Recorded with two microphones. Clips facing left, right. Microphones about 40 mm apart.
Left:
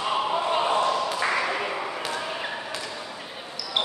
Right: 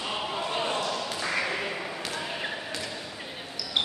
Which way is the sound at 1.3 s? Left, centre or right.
Centre.